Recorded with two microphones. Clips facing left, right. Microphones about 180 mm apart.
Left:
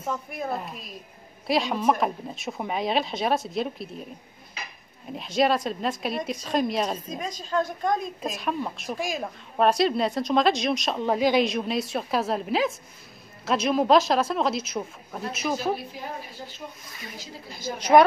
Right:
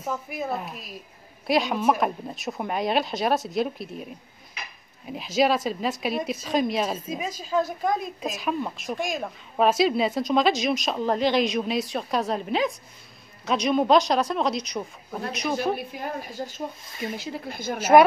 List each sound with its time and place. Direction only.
0.0 s speech: centre (ahead or behind)
5.1 s speech: centre (ahead or behind)
15.7 s speech: 50° right (ahead or behind)
17.2 s a woman's voice: 60° right (ahead or behind)
17.7 s speech: 5° right (ahead or behind)